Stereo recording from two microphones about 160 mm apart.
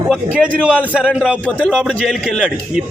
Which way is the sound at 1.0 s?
5° right (ahead or behind).